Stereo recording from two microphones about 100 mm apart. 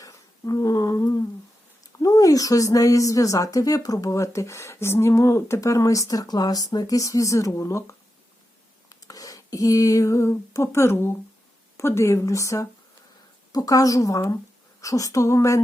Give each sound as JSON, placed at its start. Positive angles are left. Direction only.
{"t": 0.0, "sound": "humming", "side_deg": 35}
{"t": 2.0, "sound": "speech", "side_deg": 35}
{"t": 8.9, "sound": "a sound", "side_deg": 35}
{"t": 11.8, "sound": "speech", "side_deg": 30}